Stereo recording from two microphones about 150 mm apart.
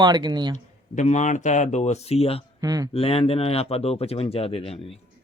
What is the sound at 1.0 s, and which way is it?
Speech, 50° left (ahead or behind).